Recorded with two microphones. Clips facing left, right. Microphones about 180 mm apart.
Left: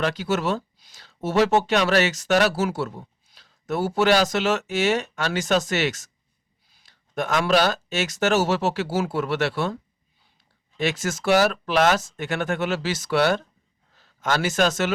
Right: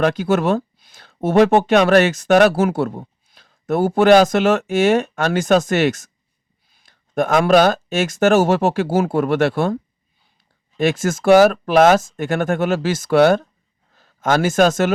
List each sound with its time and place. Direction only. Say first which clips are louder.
0.0 s speech: right 7 dB; 50° right (ahead or behind)
10.8 s speech: right 7 dB; 50° right (ahead or behind)